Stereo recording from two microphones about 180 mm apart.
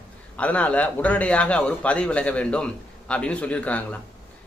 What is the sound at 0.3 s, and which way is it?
Speech, 5° left (ahead or behind).